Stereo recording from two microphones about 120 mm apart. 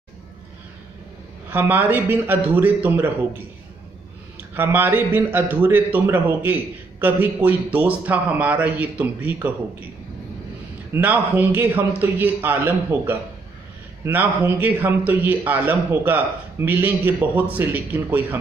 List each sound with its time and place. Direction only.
1.5 s a man's voice: 15° right (ahead or behind)
4.6 s a man's voice: 15° right (ahead or behind)
10.9 s a man's voice: 15° right (ahead or behind)